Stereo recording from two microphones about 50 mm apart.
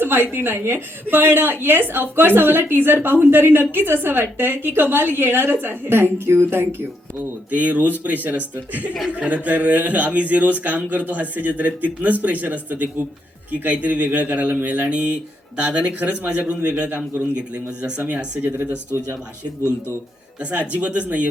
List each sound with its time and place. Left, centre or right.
0.0 s a sound: right
0.3 s a woman's voice: right
7.2 s speech: right
20.4 s speech: right